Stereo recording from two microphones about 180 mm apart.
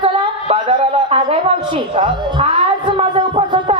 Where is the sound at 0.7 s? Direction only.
35° right (ahead or behind).